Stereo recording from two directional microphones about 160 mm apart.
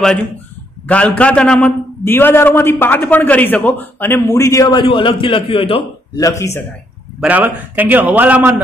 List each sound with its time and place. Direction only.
0.8 s a man's voice: 10° left (ahead or behind)
4.8 s a man's voice: 30° left (ahead or behind)
6.1 s speech: 20° left (ahead or behind)
7.2 s a man's voice: 10° right (ahead or behind)